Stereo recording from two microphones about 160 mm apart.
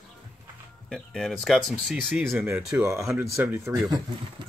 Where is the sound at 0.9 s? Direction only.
Centre (ahead or behind).